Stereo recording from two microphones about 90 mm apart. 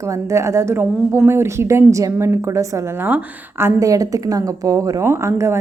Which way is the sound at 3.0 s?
20° right (ahead or behind).